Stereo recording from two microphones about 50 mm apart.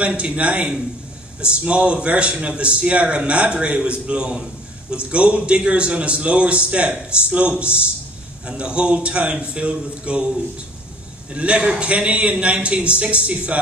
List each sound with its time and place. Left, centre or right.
0.0 s a man's voice: right
11.3 s a man's voice: right